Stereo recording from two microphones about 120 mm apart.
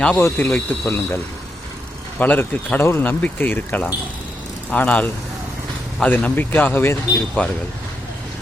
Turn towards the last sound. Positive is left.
turn(degrees=15)  # may be behind; listen again after turning